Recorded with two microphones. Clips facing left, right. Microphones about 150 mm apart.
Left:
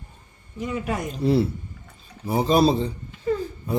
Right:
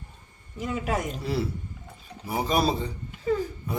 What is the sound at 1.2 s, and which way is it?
A man's voice, 25° left (ahead or behind).